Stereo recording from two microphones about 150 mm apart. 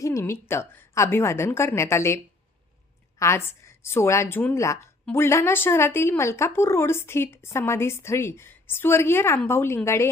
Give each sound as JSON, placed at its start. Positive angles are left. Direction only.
{"t": 0.0, "sound": "a woman's voice", "side_deg": 20}